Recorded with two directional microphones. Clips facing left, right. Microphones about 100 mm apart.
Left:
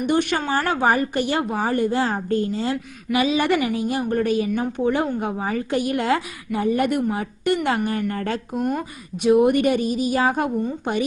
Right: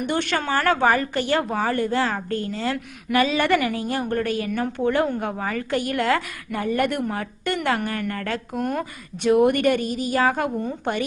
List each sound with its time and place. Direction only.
0.1 s a woman's voice: 15° left (ahead or behind)
8.6 s a woman's voice: 10° left (ahead or behind)